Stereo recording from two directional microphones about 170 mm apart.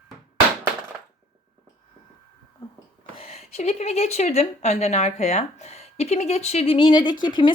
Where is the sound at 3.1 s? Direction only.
35° left (ahead or behind).